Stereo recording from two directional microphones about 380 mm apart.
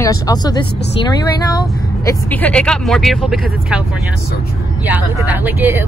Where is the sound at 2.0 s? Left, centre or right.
Centre.